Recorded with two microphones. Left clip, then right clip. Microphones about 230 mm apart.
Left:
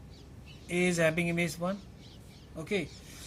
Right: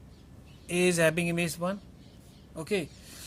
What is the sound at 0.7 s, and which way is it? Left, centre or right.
A man's voice, right.